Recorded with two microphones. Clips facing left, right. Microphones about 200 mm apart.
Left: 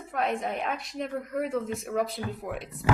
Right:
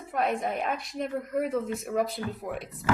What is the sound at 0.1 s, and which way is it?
A woman's voice, centre (ahead or behind).